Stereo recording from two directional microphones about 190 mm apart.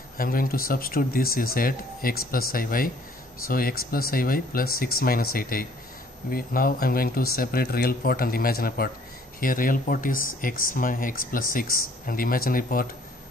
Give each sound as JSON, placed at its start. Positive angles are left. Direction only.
{"t": 0.2, "sound": "speech", "side_deg": 50}